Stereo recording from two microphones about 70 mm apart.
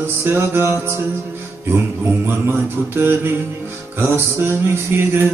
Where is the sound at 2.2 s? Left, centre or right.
Right.